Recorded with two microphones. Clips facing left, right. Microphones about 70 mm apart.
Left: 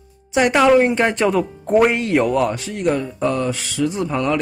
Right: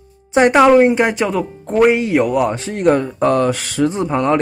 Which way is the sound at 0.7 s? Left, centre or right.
Centre.